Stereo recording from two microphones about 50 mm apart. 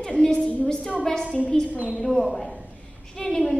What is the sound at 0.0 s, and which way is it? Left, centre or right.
Speech, centre.